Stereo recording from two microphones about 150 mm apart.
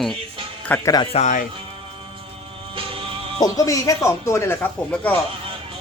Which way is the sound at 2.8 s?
35° right (ahead or behind).